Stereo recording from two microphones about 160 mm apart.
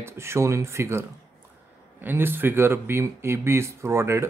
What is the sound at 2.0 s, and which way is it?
Speech, 15° right (ahead or behind).